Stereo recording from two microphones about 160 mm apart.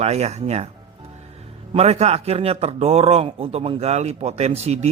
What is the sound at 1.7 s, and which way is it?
Speech, 40° right (ahead or behind).